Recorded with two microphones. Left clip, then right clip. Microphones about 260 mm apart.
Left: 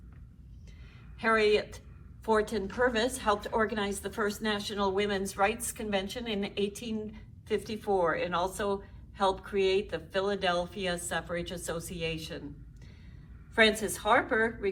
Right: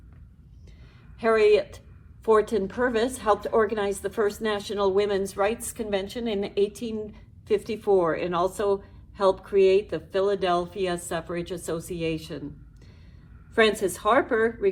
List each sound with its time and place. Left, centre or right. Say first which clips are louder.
1.2 s a woman's voice: right 6 dB; right
13.6 s a woman's voice: right 4 dB; right